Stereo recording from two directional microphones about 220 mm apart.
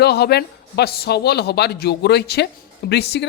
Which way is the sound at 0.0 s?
45° left (ahead or behind).